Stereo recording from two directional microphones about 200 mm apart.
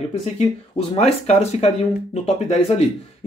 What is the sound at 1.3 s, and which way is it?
Speech, 30° left (ahead or behind).